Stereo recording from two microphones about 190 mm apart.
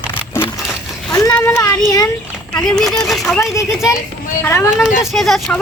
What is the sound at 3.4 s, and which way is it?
Speech, 15° left (ahead or behind).